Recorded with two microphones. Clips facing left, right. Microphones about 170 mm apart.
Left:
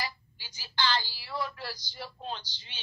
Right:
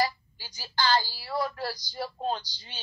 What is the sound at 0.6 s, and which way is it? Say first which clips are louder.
A man's voice: right 5 dB; 45° right (ahead or behind).